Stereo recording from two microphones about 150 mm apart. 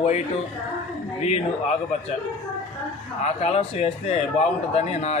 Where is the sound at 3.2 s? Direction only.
45° left (ahead or behind).